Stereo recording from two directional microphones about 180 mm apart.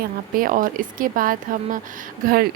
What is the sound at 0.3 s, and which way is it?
Speech, 50° right (ahead or behind).